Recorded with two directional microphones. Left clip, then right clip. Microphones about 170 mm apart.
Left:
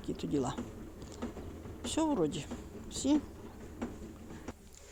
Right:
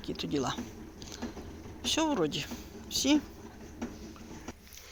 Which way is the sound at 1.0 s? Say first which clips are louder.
Right 4 dB; 15° left (ahead or behind).